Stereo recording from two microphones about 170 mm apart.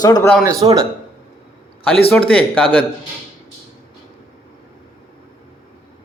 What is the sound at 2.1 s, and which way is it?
Speech, 10° left (ahead or behind).